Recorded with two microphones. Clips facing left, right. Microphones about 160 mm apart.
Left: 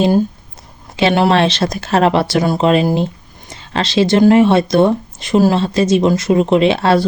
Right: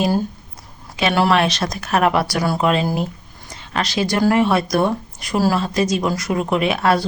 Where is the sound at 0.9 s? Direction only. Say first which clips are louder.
Left 4 dB; 25° left (ahead or behind).